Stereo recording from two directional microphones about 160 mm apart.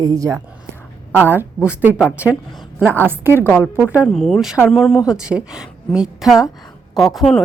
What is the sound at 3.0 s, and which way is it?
Speech, 10° right (ahead or behind).